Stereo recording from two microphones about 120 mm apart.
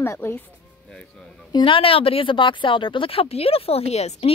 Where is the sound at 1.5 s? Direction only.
45° left (ahead or behind).